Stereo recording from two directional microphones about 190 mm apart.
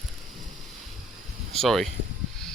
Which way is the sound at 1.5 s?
Centre (ahead or behind).